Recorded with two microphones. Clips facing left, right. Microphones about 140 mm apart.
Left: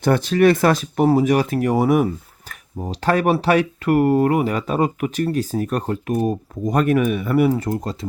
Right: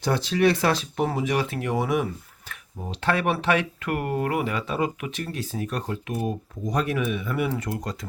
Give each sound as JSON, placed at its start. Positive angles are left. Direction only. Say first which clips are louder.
{"t": 0.0, "sound": "speech", "louder": "left 6 dB", "side_deg": 50}
{"t": 7.4, "sound": "speech", "louder": "left 8 dB", "side_deg": 35}